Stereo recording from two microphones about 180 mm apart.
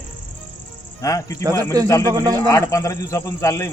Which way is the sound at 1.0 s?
20° left (ahead or behind).